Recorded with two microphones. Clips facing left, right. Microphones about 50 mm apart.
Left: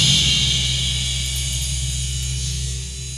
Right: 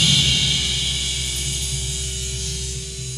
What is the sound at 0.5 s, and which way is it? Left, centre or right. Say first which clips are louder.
Music: even; centre.